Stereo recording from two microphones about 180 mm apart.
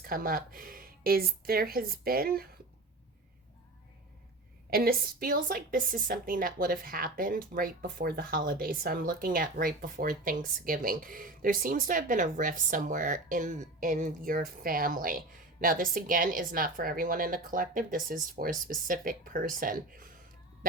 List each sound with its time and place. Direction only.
0.0 s speech: 55° right (ahead or behind)
4.7 s a woman's voice: 55° right (ahead or behind)